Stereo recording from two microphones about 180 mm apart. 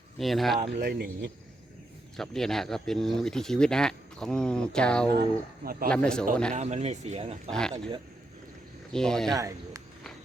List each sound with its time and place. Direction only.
0.2 s speech: centre (ahead or behind)
0.6 s speech: 55° right (ahead or behind)
2.1 s speech: centre (ahead or behind)
6.5 s speech: 40° right (ahead or behind)
7.5 s speech: 5° left (ahead or behind)
8.9 s speech: centre (ahead or behind)
9.3 s speech: 20° right (ahead or behind)